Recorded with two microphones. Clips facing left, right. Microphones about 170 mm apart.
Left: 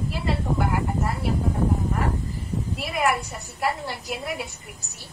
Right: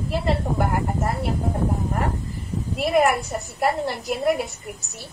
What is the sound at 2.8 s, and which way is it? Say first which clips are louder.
A woman's voice: right 7 dB; 45° right (ahead or behind).